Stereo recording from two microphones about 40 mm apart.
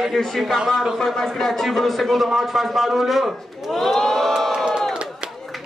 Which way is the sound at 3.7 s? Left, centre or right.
Centre.